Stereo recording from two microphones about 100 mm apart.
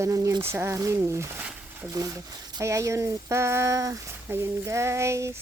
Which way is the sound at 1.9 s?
35° right (ahead or behind).